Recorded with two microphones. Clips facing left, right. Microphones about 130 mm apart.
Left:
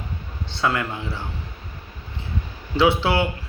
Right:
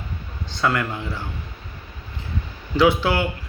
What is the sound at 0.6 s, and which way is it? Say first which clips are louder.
Speech: right 1 dB; 25° left (ahead or behind).